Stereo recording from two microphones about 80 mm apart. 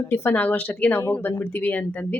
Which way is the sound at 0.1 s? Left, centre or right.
Left.